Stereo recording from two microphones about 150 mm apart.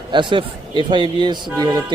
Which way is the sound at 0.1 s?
30° right (ahead or behind).